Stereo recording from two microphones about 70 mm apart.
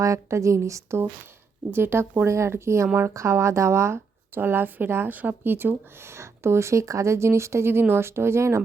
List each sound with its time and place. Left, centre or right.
0.0 s speech: right